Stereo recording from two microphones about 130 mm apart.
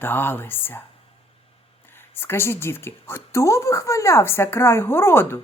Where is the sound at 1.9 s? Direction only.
15° left (ahead or behind).